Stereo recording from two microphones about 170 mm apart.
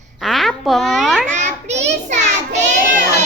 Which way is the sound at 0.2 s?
Centre (ahead or behind).